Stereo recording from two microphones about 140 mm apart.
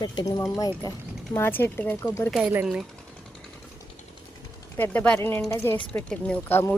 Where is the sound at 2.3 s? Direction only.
10° right (ahead or behind).